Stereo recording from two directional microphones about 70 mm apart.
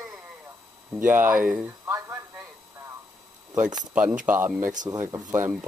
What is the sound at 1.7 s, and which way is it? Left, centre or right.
Speech, right.